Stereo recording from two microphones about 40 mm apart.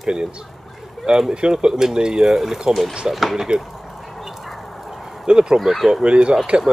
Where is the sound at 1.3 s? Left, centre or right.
Right.